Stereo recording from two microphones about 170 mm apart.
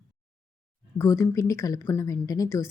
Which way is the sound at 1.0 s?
15° left (ahead or behind).